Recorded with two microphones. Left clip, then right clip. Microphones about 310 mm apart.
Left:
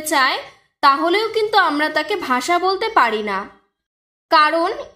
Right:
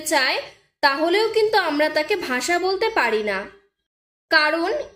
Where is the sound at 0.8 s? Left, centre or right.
Centre.